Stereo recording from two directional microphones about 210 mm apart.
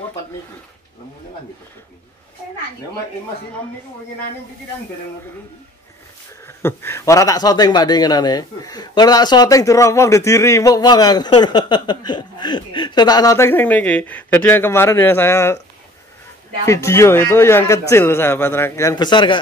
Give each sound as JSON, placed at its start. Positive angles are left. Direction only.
{"t": 6.4, "sound": "speech", "side_deg": 10}
{"t": 16.6, "sound": "speech", "side_deg": 15}